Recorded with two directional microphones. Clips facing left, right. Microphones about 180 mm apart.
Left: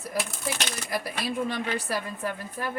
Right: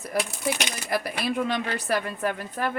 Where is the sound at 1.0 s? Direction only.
70° right (ahead or behind).